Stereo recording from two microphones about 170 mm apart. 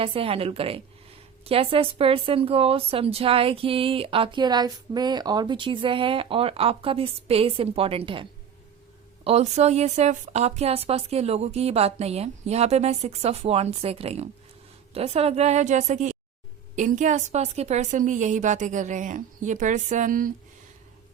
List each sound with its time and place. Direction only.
0.0 s a woman's voice: 35° right (ahead or behind); by 20.3 s 55° right (ahead or behind)